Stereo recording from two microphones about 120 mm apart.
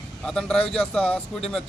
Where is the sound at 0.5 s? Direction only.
55° left (ahead or behind).